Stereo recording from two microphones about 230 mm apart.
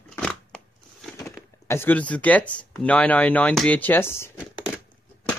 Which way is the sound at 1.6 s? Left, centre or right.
Centre.